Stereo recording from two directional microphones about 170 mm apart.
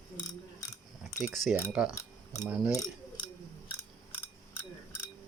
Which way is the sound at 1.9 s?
15° left (ahead or behind).